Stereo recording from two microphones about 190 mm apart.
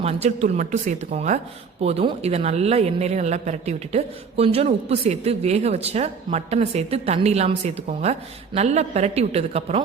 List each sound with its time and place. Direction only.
0.0 s speech: 35° right (ahead or behind)